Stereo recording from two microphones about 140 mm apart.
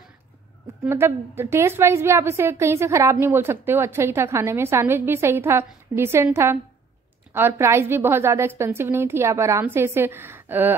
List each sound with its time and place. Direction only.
0.8 s a woman's voice: 15° right (ahead or behind)